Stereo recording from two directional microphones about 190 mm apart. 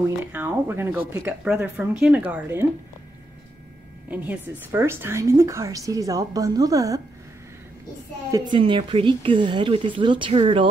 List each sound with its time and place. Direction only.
0.3 s speech: 10° right (ahead or behind)
4.1 s speech: 10° right (ahead or behind)
8.3 s speech: 25° right (ahead or behind)